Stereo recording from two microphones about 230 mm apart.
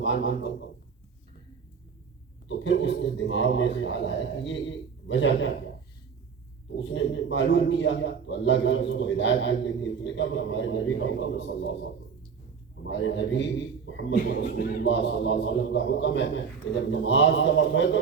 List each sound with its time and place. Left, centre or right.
0.0 s a man's voice: left
2.5 s a man's voice: left
6.7 s a man's voice: left